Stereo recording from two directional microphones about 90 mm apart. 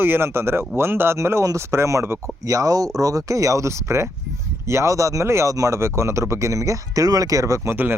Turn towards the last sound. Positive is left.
turn(degrees=-25)  # may be behind; listen again after turning